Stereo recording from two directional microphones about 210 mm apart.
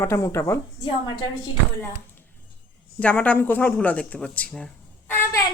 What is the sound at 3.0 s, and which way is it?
Speech, 5° left (ahead or behind).